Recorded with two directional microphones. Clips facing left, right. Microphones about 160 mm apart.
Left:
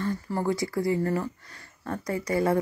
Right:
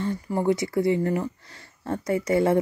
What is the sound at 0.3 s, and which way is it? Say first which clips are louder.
Speech: right 6 dB; 20° right (ahead or behind).